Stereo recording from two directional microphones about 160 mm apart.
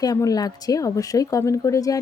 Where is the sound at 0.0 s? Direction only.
20° left (ahead or behind).